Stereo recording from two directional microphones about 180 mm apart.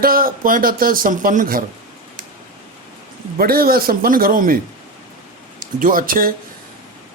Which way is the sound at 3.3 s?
55° right (ahead or behind).